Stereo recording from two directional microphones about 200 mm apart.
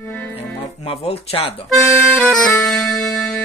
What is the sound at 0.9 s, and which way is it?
Music, 30° left (ahead or behind).